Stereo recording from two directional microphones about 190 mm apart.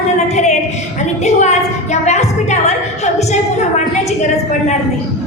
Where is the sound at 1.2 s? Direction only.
35° left (ahead or behind).